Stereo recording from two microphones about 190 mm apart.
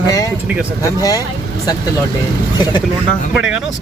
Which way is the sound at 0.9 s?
20° left (ahead or behind).